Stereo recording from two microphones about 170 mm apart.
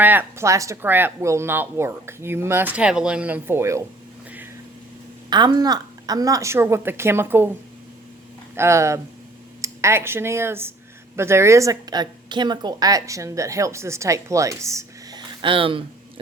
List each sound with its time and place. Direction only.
0.0 s speech: 10° right (ahead or behind)
5.3 s speech: 25° right (ahead or behind)
8.5 s a woman's voice: 15° right (ahead or behind); by 16.2 s 30° right (ahead or behind)